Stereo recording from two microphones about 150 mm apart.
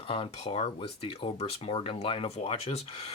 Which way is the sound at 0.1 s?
40° left (ahead or behind).